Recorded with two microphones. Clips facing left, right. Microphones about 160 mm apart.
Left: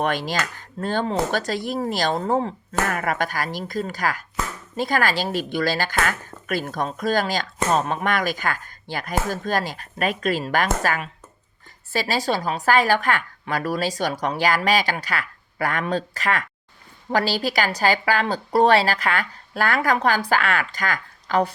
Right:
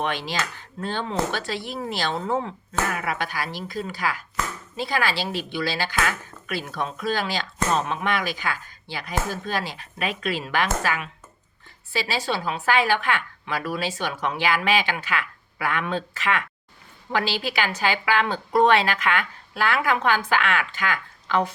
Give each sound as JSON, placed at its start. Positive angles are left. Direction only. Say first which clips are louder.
{"t": 0.0, "sound": "a woman's voice", "louder": "left 3 dB", "side_deg": 45}